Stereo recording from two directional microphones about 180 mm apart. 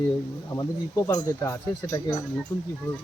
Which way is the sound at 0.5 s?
20° left (ahead or behind).